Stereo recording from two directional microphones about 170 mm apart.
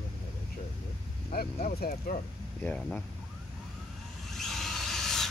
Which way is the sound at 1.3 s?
65° left (ahead or behind).